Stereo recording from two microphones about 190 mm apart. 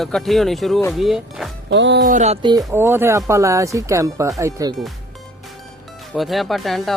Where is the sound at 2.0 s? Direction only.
40° right (ahead or behind).